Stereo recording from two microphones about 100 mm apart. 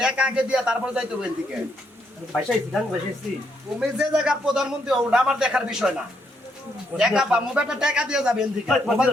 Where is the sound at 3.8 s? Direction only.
5° right (ahead or behind).